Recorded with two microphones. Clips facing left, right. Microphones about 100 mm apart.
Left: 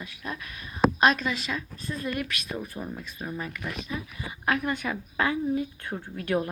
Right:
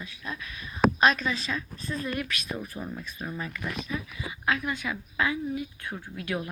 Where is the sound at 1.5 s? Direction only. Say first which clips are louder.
Even; 10° left (ahead or behind).